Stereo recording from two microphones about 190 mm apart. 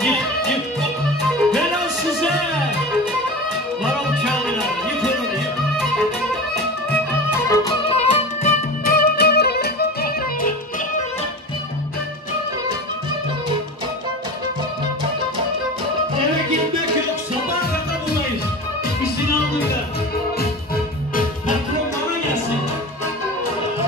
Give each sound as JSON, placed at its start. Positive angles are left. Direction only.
{"t": 3.8, "sound": "music", "side_deg": 0}
{"t": 6.9, "sound": "music", "side_deg": 10}
{"t": 7.9, "sound": "music", "side_deg": 30}
{"t": 8.8, "sound": "music", "side_deg": 55}